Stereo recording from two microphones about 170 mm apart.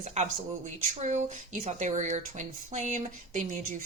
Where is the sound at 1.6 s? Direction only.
45° right (ahead or behind).